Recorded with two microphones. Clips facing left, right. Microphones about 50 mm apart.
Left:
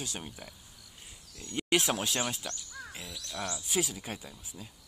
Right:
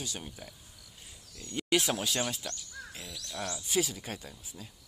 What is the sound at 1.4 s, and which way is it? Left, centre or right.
Speech, centre.